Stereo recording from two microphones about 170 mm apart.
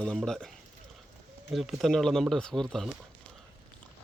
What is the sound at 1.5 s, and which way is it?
Speech, centre (ahead or behind).